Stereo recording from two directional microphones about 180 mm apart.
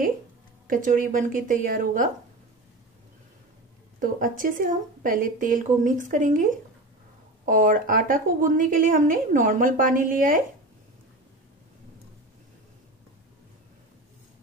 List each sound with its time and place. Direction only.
0.7 s a woman's voice: 50° right (ahead or behind)
4.0 s a woman's voice: 50° right (ahead or behind)
7.4 s a woman's voice: 50° right (ahead or behind)